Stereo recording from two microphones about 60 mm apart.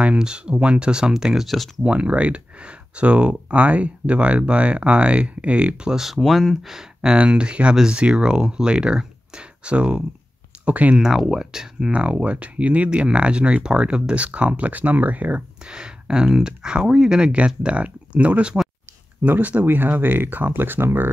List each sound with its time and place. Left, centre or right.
0.0 s speech: centre
1.8 s speech: centre
5.9 s speech: centre; by 11.0 s right
11.0 s speech: centre
11.9 s speech: centre
15.6 s speech: centre; by 21.1 s right